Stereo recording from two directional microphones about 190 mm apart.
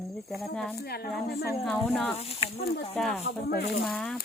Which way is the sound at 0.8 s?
55° left (ahead or behind).